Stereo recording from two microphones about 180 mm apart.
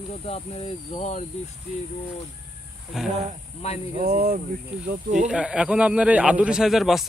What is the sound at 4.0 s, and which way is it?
Speech, 50° right (ahead or behind).